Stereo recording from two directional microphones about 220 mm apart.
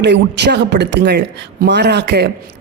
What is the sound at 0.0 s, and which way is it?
Speech, 50° right (ahead or behind).